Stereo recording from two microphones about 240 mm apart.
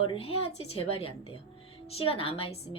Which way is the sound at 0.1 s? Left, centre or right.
Left.